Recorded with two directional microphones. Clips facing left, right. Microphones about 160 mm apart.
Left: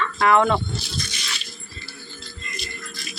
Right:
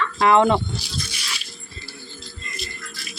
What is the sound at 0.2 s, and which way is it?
Speech, 25° right (ahead or behind).